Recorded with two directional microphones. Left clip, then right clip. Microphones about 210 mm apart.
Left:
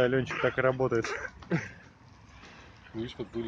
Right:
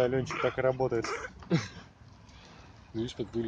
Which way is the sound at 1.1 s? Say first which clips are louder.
Even; 50° right (ahead or behind).